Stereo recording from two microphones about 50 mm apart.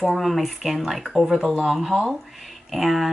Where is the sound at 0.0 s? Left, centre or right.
Centre.